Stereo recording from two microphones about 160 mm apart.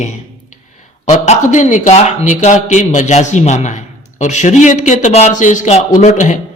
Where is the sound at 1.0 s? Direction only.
45° left (ahead or behind).